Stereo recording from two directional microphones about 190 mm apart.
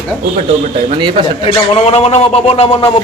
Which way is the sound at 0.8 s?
25° right (ahead or behind).